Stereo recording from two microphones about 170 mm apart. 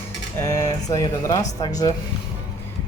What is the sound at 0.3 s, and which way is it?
Speech, 20° left (ahead or behind).